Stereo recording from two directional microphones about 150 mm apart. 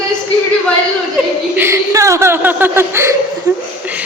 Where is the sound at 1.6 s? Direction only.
20° right (ahead or behind).